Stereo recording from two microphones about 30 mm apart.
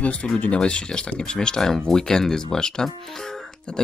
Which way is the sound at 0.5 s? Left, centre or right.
Left.